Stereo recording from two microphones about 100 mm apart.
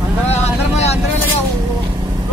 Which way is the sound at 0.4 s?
90° left.